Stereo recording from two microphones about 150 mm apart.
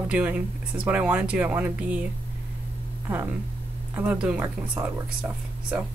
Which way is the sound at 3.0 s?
15° right (ahead or behind).